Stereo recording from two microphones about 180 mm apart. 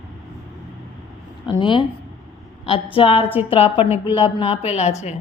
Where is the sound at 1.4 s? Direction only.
25° left (ahead or behind).